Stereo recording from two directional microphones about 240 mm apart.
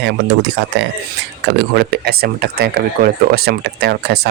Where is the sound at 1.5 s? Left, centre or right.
Right.